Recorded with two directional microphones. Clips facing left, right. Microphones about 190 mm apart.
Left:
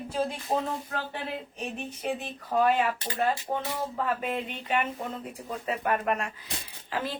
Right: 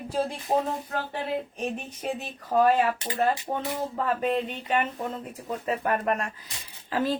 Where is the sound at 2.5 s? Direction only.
40° right (ahead or behind).